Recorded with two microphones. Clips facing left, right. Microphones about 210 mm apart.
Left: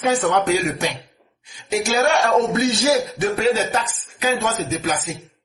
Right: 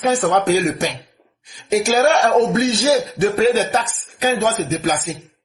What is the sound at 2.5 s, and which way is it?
Music, 25° right (ahead or behind).